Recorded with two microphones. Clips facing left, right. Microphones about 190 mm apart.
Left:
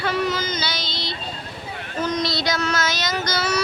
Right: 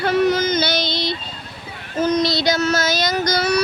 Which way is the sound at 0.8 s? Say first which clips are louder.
Right 8 dB; 15° right (ahead or behind).